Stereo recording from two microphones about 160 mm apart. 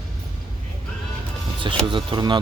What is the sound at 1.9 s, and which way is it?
Speech, 30° right (ahead or behind).